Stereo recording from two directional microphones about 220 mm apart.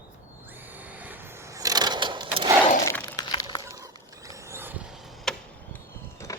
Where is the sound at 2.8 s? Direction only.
15° left (ahead or behind).